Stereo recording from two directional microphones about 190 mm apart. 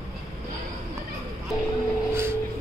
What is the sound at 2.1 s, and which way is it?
Vehicle, 15° right (ahead or behind).